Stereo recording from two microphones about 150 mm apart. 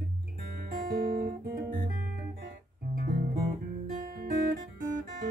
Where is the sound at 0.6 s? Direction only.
65° right (ahead or behind); by 1.8 s 80° right.